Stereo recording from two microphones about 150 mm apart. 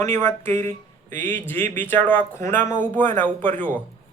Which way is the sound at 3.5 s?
60° right (ahead or behind).